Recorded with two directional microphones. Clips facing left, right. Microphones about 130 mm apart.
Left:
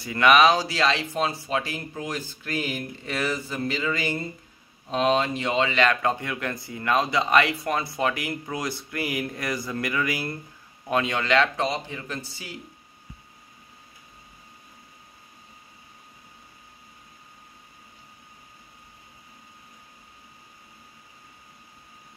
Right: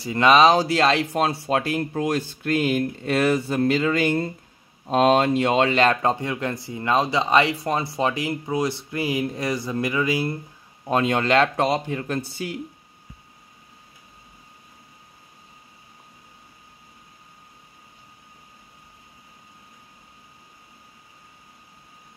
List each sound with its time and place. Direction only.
0.0 s speech: 30° right (ahead or behind)
0.6 s speech: 50° right (ahead or behind)
5.8 s speech: 35° right (ahead or behind)
10.9 s speech: 40° right (ahead or behind); by 12.5 s 55° right (ahead or behind)